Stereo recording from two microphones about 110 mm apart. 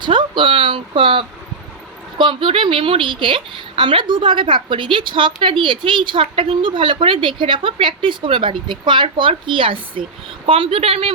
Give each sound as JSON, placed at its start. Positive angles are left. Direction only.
{"t": 0.0, "sound": "a woman's voice", "side_deg": -50}